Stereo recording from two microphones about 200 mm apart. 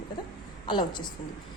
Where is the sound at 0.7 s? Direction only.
20° left (ahead or behind).